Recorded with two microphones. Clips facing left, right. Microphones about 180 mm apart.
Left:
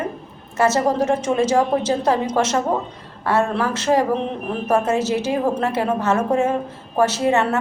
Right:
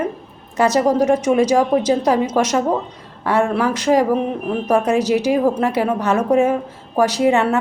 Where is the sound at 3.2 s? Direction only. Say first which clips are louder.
Right 2 dB; 15° right (ahead or behind).